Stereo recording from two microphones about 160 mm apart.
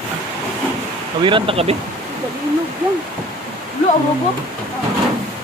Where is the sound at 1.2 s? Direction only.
35° right (ahead or behind).